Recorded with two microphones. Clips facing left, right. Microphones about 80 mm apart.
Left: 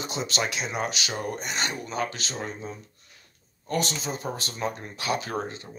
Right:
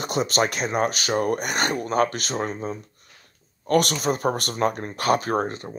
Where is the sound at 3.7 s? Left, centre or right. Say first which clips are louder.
Right 8 dB; right.